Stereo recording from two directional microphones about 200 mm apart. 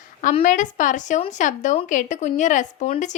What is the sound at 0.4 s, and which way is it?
A woman's voice, 40° left (ahead or behind).